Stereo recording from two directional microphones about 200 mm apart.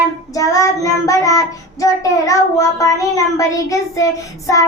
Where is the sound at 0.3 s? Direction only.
15° left (ahead or behind).